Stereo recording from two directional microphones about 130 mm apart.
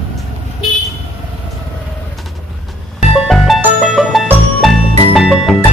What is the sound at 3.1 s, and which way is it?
Music, centre (ahead or behind).